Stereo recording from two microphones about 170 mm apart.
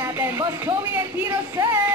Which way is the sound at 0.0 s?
15° right (ahead or behind).